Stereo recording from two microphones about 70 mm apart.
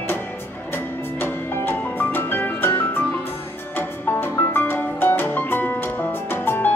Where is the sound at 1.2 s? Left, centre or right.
Left.